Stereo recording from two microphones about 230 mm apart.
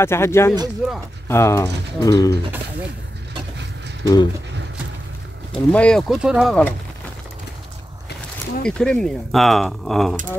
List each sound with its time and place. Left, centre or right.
0.0 s speech: centre
4.0 s speech: centre
5.7 s speech: centre
8.6 s speech: centre